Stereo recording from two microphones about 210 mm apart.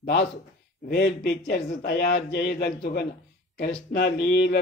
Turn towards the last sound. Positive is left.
turn(degrees=50)  # may be behind; listen again after turning